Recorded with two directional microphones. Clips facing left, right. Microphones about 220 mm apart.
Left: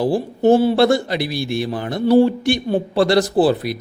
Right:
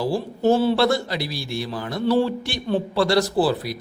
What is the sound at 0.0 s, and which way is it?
A man's voice, 15° left (ahead or behind).